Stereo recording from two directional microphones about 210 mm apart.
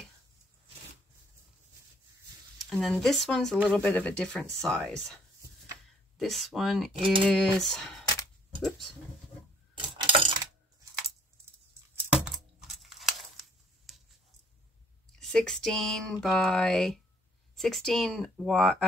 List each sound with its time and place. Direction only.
2.6 s speech: centre (ahead or behind)
7.0 s speech: 25° right (ahead or behind)
7.2 s speech: centre (ahead or behind)
8.0 s a sound: 15° left (ahead or behind)
8.6 s speech: centre (ahead or behind)
9.8 s coin: 25° right (ahead or behind)
11.9 s a sound: 5° right (ahead or behind)
15.1 s speech: 5° left (ahead or behind)